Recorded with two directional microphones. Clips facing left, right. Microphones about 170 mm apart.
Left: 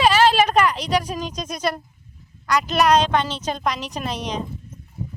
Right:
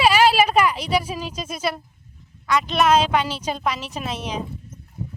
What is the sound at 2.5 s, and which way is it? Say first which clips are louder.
Speech: even; centre (ahead or behind).